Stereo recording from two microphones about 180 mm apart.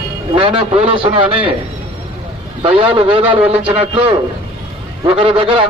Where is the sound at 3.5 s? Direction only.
30° right (ahead or behind).